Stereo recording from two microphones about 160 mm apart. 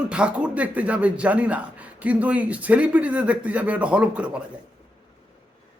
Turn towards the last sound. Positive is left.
turn(degrees=-5)  # may be behind; listen again after turning